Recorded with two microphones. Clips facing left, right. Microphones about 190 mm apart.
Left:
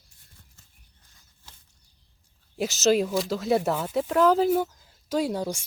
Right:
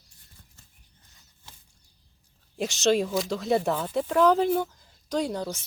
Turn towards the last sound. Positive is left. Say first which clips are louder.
# left 2 dB
turn(degrees=10)  # may be behind; listen again after turning